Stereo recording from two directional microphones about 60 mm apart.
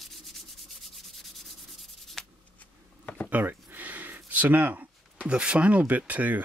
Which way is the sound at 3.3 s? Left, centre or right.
Right.